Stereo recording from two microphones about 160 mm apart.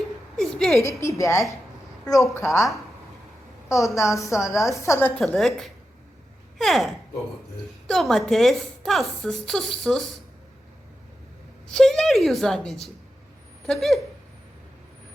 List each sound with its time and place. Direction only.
0.3 s a sound: 5° left (ahead or behind)
0.8 s a woman's voice: 20° left (ahead or behind)
3.7 s a woman's voice: 20° left (ahead or behind)
5.2 s a woman's voice: centre (ahead or behind)
11.7 s a woman's voice: centre (ahead or behind)